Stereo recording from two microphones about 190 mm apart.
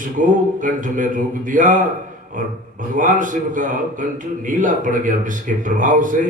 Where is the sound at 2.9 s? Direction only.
45° right (ahead or behind).